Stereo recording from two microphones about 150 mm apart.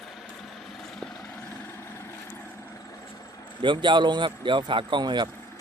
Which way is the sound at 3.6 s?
30° right (ahead or behind).